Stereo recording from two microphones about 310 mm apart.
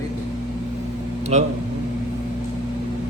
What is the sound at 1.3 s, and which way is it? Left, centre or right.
Speech, right.